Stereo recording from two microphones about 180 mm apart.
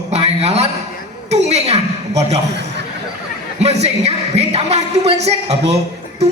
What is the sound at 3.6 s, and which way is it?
Speech, 35° right (ahead or behind).